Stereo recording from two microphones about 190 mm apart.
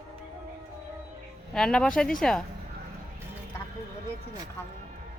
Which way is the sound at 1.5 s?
5° left (ahead or behind).